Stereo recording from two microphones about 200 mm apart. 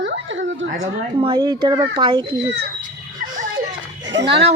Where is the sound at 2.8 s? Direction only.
40° right (ahead or behind).